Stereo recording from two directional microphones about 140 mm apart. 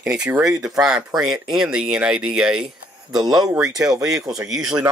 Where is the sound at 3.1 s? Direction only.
30° right (ahead or behind).